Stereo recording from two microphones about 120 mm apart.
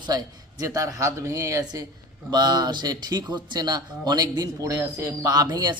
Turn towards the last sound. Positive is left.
turn(degrees=-35)  # may be behind; listen again after turning